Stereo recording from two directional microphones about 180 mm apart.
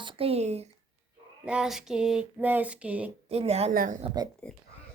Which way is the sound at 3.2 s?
35° right (ahead or behind).